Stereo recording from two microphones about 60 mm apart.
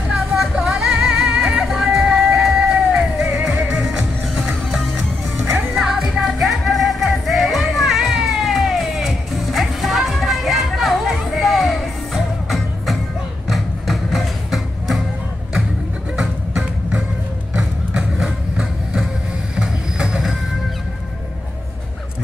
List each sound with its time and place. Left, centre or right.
0.4 s music: centre
4.6 s music: centre
16.2 s music: centre
17.6 s a sound: centre
19.5 s train: centre